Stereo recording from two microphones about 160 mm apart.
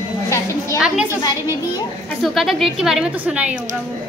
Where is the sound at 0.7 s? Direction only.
5° right (ahead or behind).